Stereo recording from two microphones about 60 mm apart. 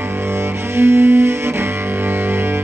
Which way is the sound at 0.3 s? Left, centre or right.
Right.